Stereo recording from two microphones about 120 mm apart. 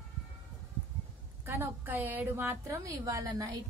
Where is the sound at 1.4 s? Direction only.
20° right (ahead or behind).